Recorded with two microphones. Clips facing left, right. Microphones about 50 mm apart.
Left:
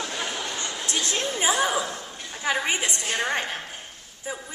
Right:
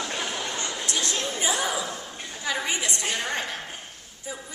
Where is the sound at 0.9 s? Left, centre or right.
Left.